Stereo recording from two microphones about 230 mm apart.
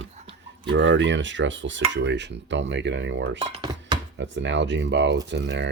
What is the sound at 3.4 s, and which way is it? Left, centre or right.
Speech, centre.